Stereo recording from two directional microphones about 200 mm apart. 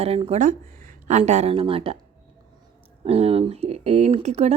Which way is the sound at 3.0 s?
30° right (ahead or behind).